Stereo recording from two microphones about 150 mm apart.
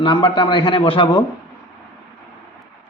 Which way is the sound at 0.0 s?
35° left (ahead or behind).